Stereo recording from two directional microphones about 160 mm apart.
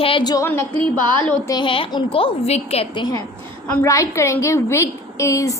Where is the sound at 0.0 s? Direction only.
35° left (ahead or behind).